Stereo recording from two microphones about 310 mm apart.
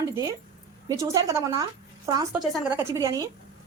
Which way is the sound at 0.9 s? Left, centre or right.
Centre.